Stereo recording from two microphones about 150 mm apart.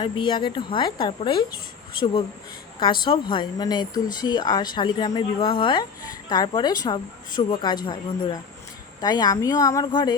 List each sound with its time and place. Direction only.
0.0 s speech: 30° left (ahead or behind)
2.8 s a woman's voice: 30° left (ahead or behind)